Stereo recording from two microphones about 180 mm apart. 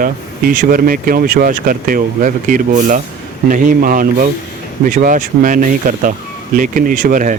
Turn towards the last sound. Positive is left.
turn(degrees=-50)  # may be behind; listen again after turning